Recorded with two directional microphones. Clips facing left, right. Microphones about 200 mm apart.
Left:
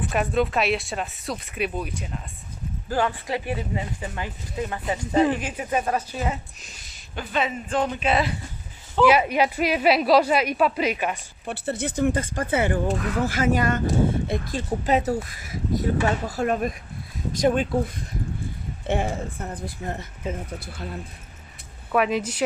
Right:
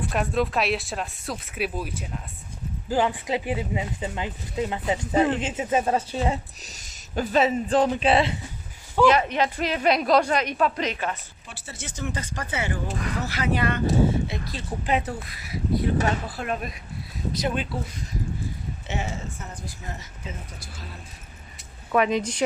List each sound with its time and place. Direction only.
0.0 s speech: centre (ahead or behind)
2.9 s speech: 15° right (ahead or behind)
9.0 s a woman's voice: 10° left (ahead or behind)
11.4 s speech: 60° left (ahead or behind)
21.9 s speech: 5° left (ahead or behind)